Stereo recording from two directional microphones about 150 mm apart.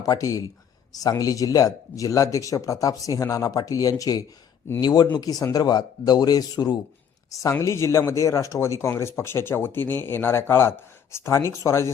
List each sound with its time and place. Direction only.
0.0 s speech: 25° left (ahead or behind)